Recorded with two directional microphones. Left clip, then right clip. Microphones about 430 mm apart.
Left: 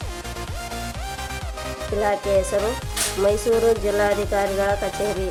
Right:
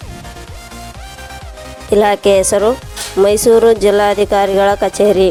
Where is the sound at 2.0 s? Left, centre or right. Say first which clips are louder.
Right 10 dB; right.